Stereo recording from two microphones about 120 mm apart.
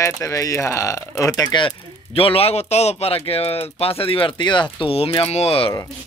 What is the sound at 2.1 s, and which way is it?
A man's voice, 55° left (ahead or behind).